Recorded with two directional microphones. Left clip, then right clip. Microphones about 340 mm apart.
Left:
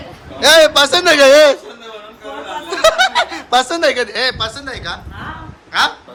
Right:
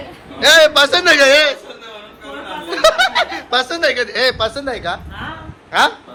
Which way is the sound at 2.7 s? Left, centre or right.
Centre.